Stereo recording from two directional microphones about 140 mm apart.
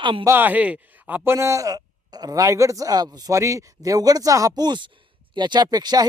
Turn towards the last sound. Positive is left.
turn(degrees=-30)  # may be behind; listen again after turning